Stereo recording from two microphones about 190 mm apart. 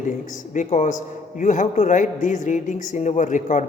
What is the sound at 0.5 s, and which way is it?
A man's voice, 40° left (ahead or behind).